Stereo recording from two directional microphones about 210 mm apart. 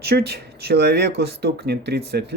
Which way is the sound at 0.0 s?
50° right (ahead or behind).